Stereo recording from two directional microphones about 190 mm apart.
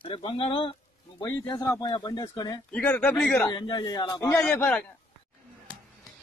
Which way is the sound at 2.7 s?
5° left (ahead or behind).